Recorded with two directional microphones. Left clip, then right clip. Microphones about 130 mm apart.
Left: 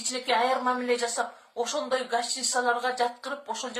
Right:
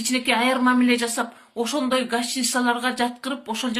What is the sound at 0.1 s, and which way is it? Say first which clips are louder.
Speech: right 4 dB; 20° right (ahead or behind).